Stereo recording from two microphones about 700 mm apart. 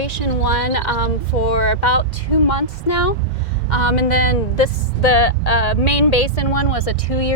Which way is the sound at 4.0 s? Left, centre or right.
Left.